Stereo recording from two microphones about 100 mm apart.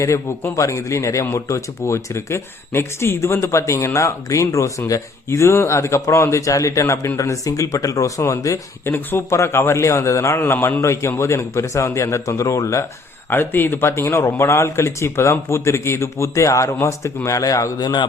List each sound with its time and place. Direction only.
0.0 s speech: 30° left (ahead or behind)